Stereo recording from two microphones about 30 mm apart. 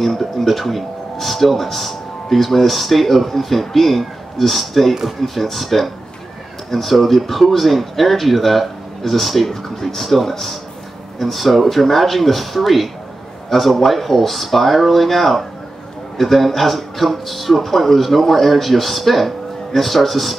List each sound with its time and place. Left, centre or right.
0.0 s speech: centre